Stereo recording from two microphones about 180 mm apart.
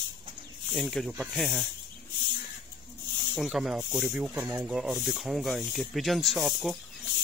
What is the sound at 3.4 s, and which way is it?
Speech, centre (ahead or behind).